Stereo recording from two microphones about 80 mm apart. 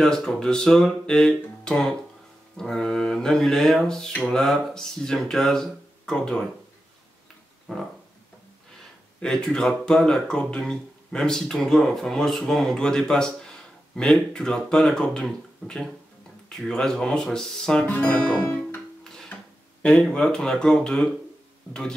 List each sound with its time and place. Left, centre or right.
0.0 s speech: centre
7.7 s speech: centre
9.2 s speech: centre
18.4 s music: left
19.8 s speech: centre